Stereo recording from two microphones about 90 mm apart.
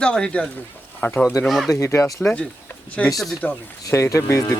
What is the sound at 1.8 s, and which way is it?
Speech, 35° left (ahead or behind).